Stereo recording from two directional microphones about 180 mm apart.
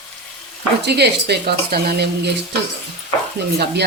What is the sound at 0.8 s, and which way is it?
Speech, 65° right (ahead or behind).